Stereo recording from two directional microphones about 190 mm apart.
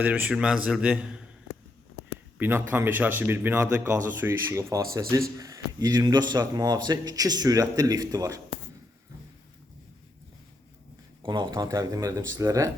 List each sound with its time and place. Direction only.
0.0 s speech: 10° right (ahead or behind)
2.4 s speech: 10° right (ahead or behind)
11.2 s speech: 25° right (ahead or behind)